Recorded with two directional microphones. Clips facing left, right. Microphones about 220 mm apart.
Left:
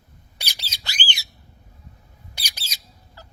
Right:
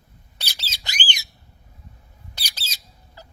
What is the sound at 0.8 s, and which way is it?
Squawk, 20° right (ahead or behind).